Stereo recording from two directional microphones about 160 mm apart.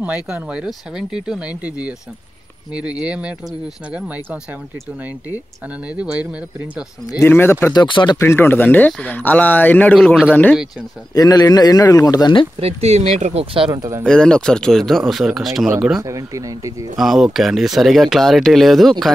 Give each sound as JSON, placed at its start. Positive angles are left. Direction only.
{"t": 0.0, "sound": "speech", "side_deg": -5}
{"t": 5.9, "sound": "speech", "side_deg": -10}
{"t": 7.1, "sound": "speech", "side_deg": 15}
{"t": 7.7, "sound": "speech", "side_deg": 30}
{"t": 8.2, "sound": "speech", "side_deg": 15}
{"t": 9.9, "sound": "speech", "side_deg": 0}
{"t": 11.1, "sound": "speech", "side_deg": 25}
{"t": 12.5, "sound": "speech", "side_deg": -40}
{"t": 13.7, "sound": "speech", "side_deg": -20}
{"t": 14.0, "sound": "speech", "side_deg": 5}
{"t": 16.0, "sound": "speech", "side_deg": -20}
{"t": 16.9, "sound": "speech", "side_deg": 0}